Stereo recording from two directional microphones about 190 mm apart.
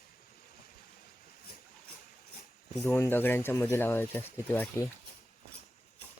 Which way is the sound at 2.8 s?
10° left (ahead or behind).